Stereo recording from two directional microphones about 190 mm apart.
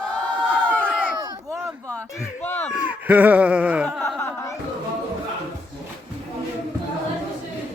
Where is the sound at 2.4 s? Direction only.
10° left (ahead or behind).